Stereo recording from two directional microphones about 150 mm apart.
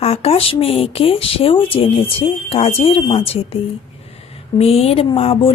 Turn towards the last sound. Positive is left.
turn(degrees=40)  # may be behind; listen again after turning